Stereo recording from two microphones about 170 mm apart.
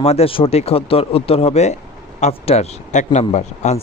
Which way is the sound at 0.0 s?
35° left (ahead or behind).